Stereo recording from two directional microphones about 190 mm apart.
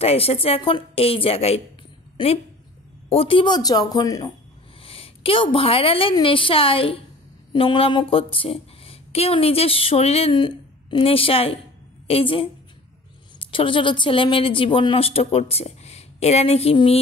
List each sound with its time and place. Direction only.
0.0 s a woman's voice: 30° left (ahead or behind)
3.1 s speech: 30° left (ahead or behind)
4.8 s a woman's voice: 30° left (ahead or behind)